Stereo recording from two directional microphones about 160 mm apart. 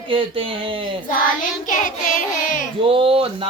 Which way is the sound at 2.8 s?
35° right (ahead or behind).